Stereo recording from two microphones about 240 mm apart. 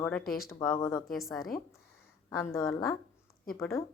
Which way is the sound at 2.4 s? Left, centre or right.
Centre.